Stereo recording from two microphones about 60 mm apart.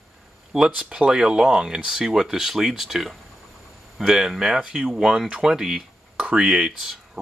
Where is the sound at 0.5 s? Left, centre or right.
Centre.